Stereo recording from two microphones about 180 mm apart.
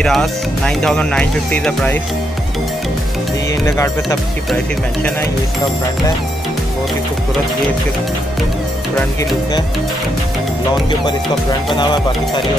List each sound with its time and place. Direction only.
0.0 s speech: centre (ahead or behind)
3.6 s speech: 15° left (ahead or behind)
11.8 s speech: 25° left (ahead or behind)